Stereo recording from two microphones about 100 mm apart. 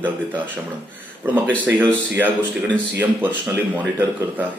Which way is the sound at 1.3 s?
15° right (ahead or behind).